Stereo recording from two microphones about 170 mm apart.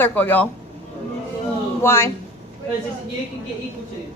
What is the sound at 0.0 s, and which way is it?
Speech, 10° left (ahead or behind).